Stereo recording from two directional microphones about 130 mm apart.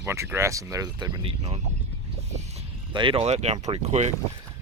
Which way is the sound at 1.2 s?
50° right (ahead or behind).